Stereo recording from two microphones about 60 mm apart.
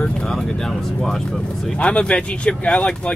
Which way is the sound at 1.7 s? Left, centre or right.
Centre.